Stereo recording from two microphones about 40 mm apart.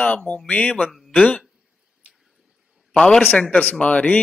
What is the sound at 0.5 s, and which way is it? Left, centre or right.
Speech, left.